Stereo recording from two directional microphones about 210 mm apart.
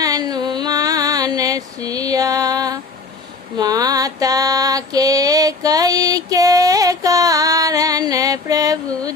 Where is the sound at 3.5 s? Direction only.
20° right (ahead or behind).